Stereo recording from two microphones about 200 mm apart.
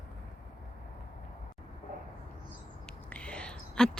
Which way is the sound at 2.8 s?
5° left (ahead or behind).